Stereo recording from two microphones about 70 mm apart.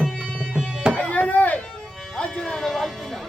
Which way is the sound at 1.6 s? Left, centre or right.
Centre.